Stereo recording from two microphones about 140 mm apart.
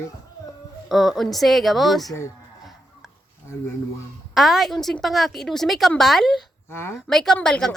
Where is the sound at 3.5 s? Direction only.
15° left (ahead or behind).